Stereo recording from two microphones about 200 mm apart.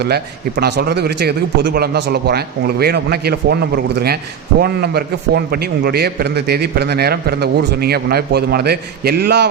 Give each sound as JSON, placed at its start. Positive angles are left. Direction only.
{"t": 0.0, "sound": "a man's voice", "side_deg": -55}
{"t": 4.6, "sound": "a man's voice", "side_deg": -50}